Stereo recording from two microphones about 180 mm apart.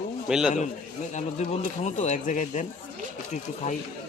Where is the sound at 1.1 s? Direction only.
40° left (ahead or behind).